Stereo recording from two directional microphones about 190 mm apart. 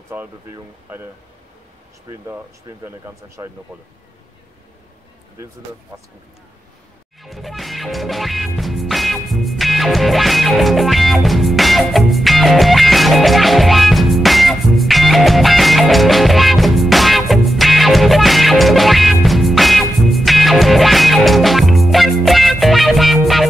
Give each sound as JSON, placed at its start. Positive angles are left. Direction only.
{"t": 0.1, "sound": "speech", "side_deg": -10}
{"t": 2.0, "sound": "speech", "side_deg": -15}
{"t": 5.9, "sound": "speech", "side_deg": -20}
{"t": 7.2, "sound": "music", "side_deg": 0}